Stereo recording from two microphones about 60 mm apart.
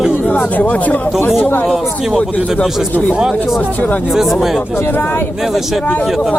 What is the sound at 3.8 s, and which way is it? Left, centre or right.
Speech, left.